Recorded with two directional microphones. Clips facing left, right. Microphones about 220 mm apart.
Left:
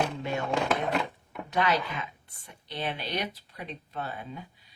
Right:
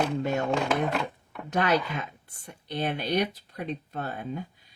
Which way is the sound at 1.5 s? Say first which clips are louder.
Right 2 dB; 45° right (ahead or behind).